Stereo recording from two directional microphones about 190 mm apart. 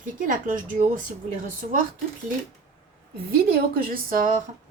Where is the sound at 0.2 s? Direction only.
45° right (ahead or behind).